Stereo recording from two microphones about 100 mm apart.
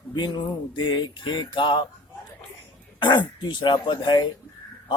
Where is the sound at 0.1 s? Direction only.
50° left (ahead or behind).